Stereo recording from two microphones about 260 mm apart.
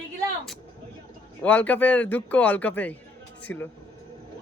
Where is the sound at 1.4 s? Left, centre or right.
Centre.